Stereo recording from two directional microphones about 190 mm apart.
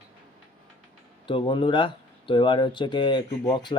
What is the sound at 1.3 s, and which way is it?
Speech, 25° left (ahead or behind).